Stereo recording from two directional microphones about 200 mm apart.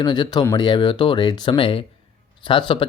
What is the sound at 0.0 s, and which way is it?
Speech, 20° left (ahead or behind).